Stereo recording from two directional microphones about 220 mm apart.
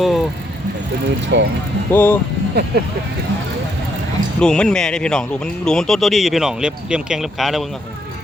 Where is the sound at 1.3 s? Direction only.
55° right (ahead or behind).